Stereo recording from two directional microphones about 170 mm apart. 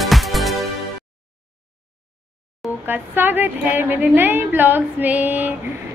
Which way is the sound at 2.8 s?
10° right (ahead or behind).